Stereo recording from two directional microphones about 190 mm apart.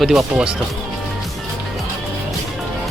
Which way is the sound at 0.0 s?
Centre (ahead or behind).